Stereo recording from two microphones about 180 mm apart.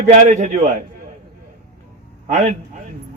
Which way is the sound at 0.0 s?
40° right (ahead or behind).